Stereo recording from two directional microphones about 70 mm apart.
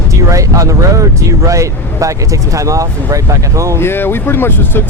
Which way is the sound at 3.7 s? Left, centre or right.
Left.